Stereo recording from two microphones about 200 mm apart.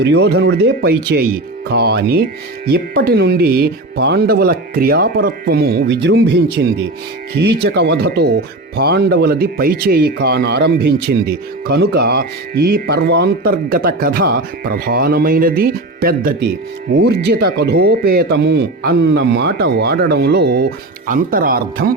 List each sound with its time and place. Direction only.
0.0 s speech: 55° right (ahead or behind)